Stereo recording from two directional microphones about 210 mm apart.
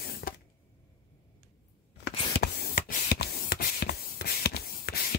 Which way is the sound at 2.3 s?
45° left (ahead or behind).